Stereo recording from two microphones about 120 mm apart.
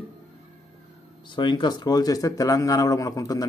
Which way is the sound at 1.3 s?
40° left (ahead or behind).